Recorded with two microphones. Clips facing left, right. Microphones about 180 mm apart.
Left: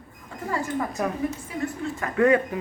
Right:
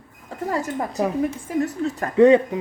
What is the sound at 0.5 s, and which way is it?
Speech, 40° right (ahead or behind).